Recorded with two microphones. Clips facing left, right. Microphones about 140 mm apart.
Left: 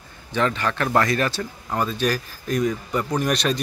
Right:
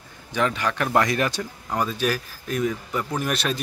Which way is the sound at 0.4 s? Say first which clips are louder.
Left 1 dB; 10° right (ahead or behind).